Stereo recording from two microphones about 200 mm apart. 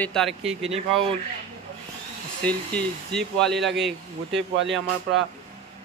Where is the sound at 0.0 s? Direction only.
5° left (ahead or behind).